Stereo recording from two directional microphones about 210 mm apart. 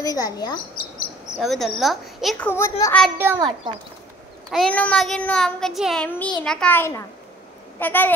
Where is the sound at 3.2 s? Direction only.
10° right (ahead or behind).